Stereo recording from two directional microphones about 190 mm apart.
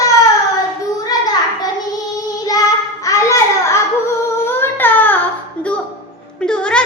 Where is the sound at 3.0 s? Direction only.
15° left (ahead or behind).